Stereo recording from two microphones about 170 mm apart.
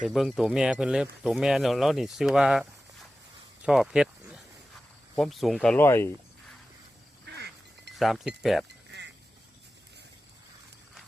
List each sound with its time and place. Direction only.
0.0 s speech: centre (ahead or behind)
7.3 s quack: 75° right (ahead or behind)
7.9 s speech: centre (ahead or behind)
8.9 s duck: 80° right